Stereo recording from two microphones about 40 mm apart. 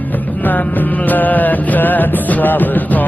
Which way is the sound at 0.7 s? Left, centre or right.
Left.